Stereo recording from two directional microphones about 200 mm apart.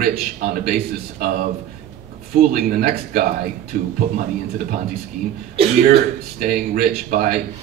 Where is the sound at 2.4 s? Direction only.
45° right (ahead or behind).